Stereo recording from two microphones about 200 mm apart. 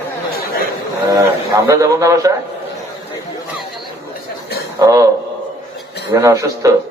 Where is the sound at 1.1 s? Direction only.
15° right (ahead or behind).